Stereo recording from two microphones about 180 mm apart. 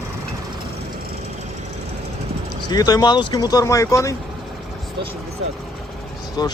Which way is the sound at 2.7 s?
20° left (ahead or behind).